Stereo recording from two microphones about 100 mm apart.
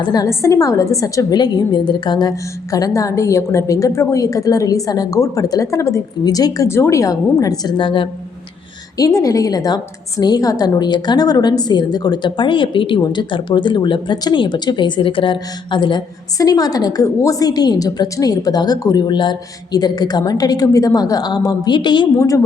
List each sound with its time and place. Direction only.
0.0 s a woman's voice: 40° left (ahead or behind)
2.3 s a woman's voice: 35° left (ahead or behind); by 8.1 s 55° left (ahead or behind)
9.0 s a woman's voice: 35° left (ahead or behind); by 16.0 s 50° left (ahead or behind)
16.4 s a woman's voice: 40° left (ahead or behind)